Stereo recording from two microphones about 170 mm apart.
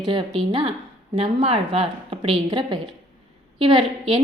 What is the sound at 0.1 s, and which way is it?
A woman's voice, 30° right (ahead or behind).